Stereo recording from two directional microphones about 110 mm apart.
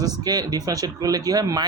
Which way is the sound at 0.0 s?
35° right (ahead or behind).